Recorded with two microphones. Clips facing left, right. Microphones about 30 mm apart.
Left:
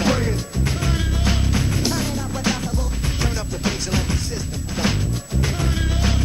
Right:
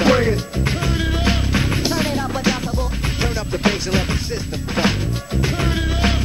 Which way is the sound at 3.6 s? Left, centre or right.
Right.